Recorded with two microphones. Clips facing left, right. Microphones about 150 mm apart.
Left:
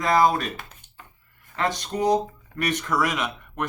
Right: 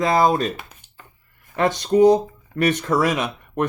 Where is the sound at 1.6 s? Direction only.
25° right (ahead or behind).